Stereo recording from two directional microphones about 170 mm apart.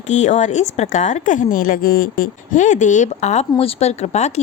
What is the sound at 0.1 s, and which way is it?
A woman's voice, 45° left (ahead or behind).